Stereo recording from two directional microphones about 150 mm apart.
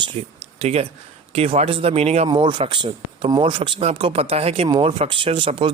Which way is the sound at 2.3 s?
30° right (ahead or behind).